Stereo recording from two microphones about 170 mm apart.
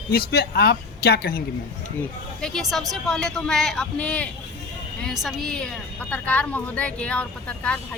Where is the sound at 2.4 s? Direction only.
Centre (ahead or behind).